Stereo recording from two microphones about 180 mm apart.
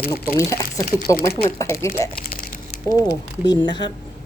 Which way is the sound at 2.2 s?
55° left (ahead or behind).